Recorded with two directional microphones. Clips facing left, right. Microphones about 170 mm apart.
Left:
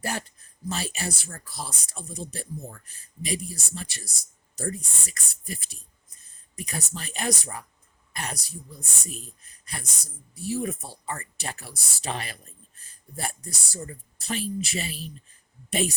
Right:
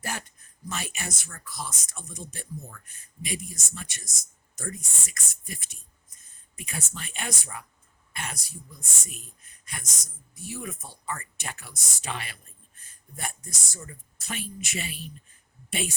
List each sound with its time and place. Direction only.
0.0 s speech: 35° left (ahead or behind)